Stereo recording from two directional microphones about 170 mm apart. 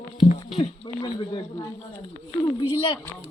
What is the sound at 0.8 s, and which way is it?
Speech, 30° left (ahead or behind).